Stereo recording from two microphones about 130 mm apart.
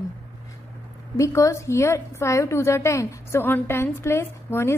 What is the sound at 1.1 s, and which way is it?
A woman's voice, 25° left (ahead or behind).